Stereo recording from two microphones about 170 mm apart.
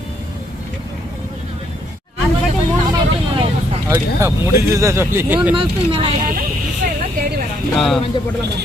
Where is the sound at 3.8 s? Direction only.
15° right (ahead or behind).